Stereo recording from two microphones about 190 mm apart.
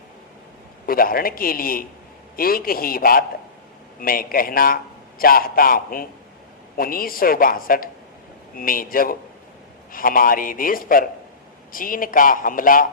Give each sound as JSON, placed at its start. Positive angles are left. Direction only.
{"t": 0.9, "sound": "a man's voice", "side_deg": 50}